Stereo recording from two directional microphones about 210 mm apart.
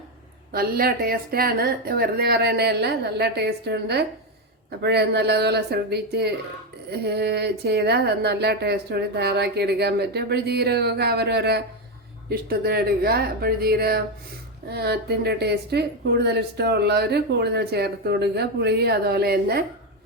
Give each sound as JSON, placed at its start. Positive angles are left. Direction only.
{"t": 0.5, "sound": "a woman's voice", "side_deg": -45}